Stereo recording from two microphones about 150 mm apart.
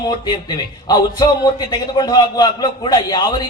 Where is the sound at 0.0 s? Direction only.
30° left (ahead or behind).